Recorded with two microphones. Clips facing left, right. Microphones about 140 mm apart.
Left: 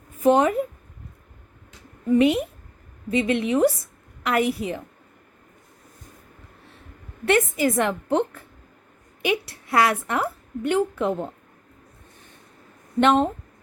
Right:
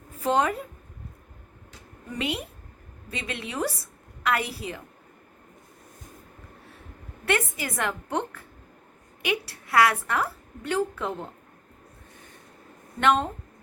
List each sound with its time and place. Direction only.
0.2 s speech: 20° left (ahead or behind)
2.1 s a woman's voice: 20° left (ahead or behind)
7.3 s a woman's voice: 25° left (ahead or behind)
13.0 s a woman's voice: 20° left (ahead or behind)